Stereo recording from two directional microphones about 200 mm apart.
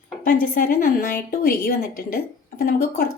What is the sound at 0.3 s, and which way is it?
Speech, 45° left (ahead or behind).